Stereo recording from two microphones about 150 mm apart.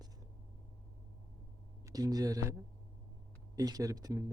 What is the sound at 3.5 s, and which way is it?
Speech, 25° right (ahead or behind).